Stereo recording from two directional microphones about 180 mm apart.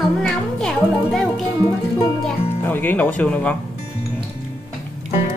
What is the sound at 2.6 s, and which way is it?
Speech, 10° left (ahead or behind).